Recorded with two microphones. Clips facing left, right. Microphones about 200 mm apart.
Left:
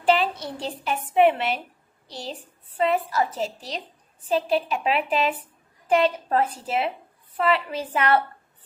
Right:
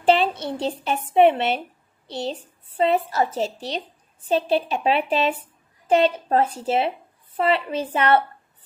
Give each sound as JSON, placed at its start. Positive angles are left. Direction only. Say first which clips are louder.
{"t": 0.0, "sound": "a child's voice", "louder": "right 3 dB", "side_deg": -25}